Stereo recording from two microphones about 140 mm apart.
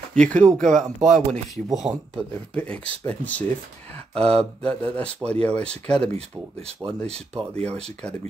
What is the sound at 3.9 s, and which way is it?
Speech, 45° right (ahead or behind).